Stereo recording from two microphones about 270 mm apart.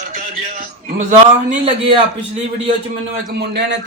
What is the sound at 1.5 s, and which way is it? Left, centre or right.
Speech, right.